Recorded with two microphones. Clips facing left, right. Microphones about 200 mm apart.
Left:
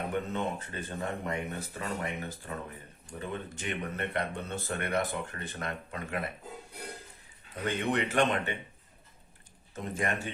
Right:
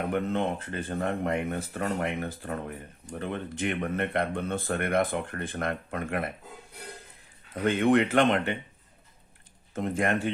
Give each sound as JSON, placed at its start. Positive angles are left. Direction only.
{"t": 0.1, "sound": "speech", "side_deg": -60}
{"t": 7.7, "sound": "speech", "side_deg": -55}
{"t": 9.7, "sound": "speech", "side_deg": -55}